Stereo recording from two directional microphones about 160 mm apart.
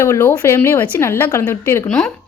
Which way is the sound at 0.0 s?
15° left (ahead or behind).